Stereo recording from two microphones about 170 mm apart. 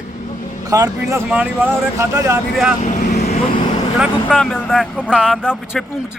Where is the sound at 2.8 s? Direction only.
45° left (ahead or behind).